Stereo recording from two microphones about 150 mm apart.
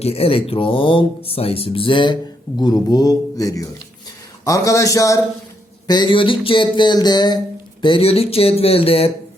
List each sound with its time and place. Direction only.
0.0 s speech: 40° left (ahead or behind); by 5.2 s 20° left (ahead or behind)
5.9 s speech: 30° left (ahead or behind)